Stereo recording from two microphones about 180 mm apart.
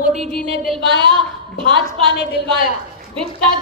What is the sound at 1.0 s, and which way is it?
Speech, 25° right (ahead or behind).